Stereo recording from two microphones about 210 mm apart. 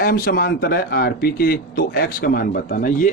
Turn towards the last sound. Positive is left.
turn(degrees=40)  # may be behind; listen again after turning